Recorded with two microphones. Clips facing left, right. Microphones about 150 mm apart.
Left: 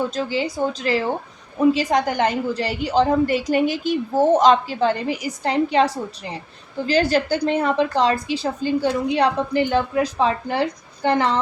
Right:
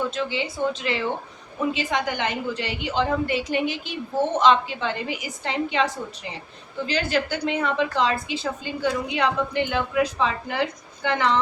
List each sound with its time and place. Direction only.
0.1 s a woman's voice: 40° left (ahead or behind)